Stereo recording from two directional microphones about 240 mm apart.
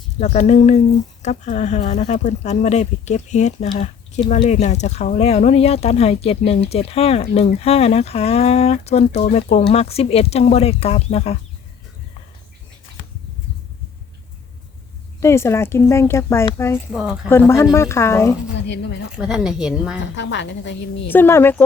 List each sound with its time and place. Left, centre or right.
0.2 s speech: left
15.2 s speech: centre
16.9 s a woman's voice: centre
17.2 s speech: centre
18.5 s speech: left
19.1 s a woman's voice: centre
20.1 s a woman's voice: left
21.1 s speech: centre